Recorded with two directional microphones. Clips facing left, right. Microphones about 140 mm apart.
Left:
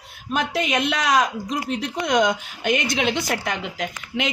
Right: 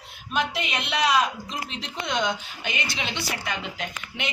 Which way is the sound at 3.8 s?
90° left.